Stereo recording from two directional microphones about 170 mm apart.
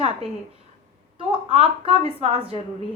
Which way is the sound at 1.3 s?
30° right (ahead or behind).